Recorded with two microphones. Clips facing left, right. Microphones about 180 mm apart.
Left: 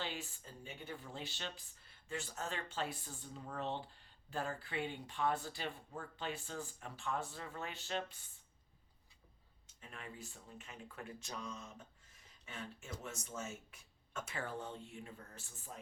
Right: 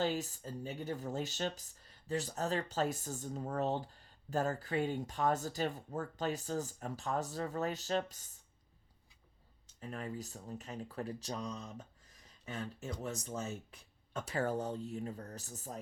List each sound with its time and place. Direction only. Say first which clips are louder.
0.0 s speech: right 10 dB; 40° right (ahead or behind)
9.8 s speech: right 9 dB; 40° right (ahead or behind)